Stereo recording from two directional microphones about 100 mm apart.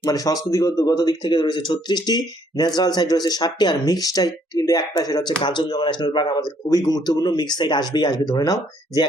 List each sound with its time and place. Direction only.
0.0 s speech: 35° left (ahead or behind)